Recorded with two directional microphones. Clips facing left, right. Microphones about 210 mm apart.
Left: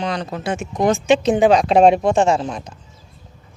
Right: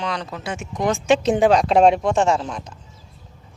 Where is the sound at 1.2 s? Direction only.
15° left (ahead or behind).